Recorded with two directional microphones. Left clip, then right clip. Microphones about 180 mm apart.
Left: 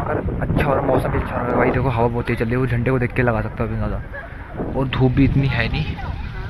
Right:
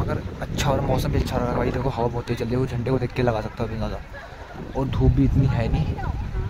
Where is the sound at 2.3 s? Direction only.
15° right (ahead or behind).